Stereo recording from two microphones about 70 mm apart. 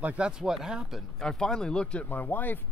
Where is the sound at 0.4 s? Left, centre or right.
Centre.